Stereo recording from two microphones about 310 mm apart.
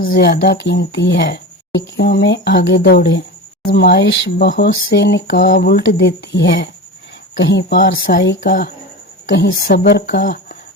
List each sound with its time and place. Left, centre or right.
0.0 s speech: left